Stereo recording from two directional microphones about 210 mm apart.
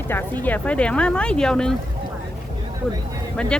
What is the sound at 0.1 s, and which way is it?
Speech, 10° left (ahead or behind).